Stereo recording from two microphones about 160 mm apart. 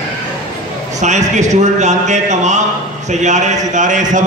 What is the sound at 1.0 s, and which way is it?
A man's voice, 50° right (ahead or behind).